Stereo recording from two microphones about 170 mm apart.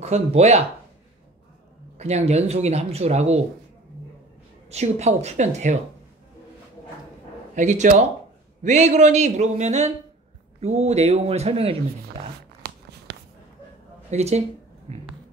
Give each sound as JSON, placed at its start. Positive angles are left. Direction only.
{"t": 0.0, "sound": "speech", "side_deg": -40}
{"t": 2.0, "sound": "speech", "side_deg": -40}
{"t": 4.6, "sound": "speech", "side_deg": -40}
{"t": 7.5, "sound": "speech", "side_deg": -45}
{"t": 12.6, "sound": "a sound", "side_deg": -70}
{"t": 14.1, "sound": "speech", "side_deg": -40}